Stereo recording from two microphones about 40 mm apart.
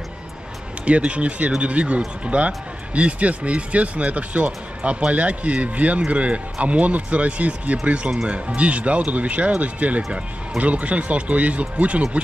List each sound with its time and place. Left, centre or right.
0.8 s speech: right